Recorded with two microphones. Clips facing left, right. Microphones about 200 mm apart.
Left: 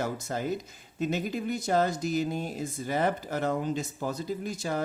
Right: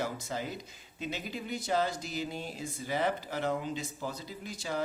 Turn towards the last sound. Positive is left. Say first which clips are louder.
# left 5 dB
turn(degrees=50)  # may be behind; listen again after turning